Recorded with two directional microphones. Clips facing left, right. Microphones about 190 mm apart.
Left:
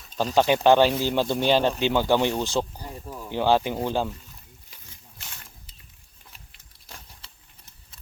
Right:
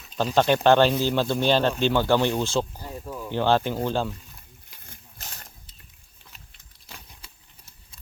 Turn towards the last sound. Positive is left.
turn(degrees=-5)  # may be behind; listen again after turning